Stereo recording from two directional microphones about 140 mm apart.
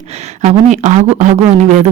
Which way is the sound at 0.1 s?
50° right (ahead or behind).